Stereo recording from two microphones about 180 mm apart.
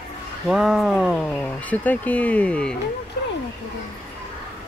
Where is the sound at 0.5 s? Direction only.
Centre (ahead or behind).